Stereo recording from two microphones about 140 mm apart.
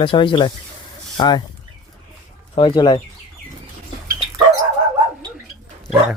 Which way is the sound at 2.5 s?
35° left (ahead or behind).